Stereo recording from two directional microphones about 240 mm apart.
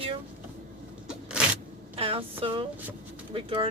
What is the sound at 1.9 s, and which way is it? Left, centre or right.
Speech, right.